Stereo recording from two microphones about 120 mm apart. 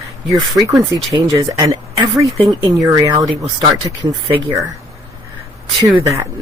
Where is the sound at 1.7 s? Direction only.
30° right (ahead or behind).